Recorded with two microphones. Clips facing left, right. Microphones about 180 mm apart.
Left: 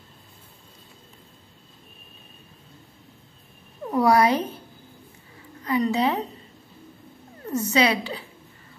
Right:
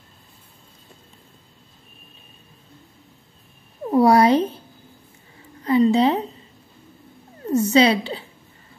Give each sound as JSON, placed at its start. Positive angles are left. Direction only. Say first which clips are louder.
{"t": 3.9, "sound": "speech", "louder": "right 4 dB", "side_deg": -30}
{"t": 5.6, "sound": "a sound", "louder": "right 6 dB", "side_deg": -30}
{"t": 7.4, "sound": "a woman's voice", "louder": "right 6 dB", "side_deg": -30}